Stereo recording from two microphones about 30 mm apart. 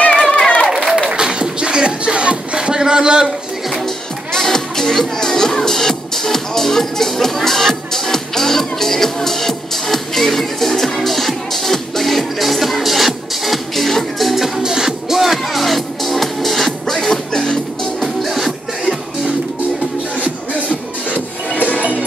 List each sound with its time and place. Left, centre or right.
0.2 s a sound: left
0.7 s a sound: centre
1.1 s music: right
4.3 s music: centre
14.6 s music: centre
18.0 s music: centre
20.6 s music: left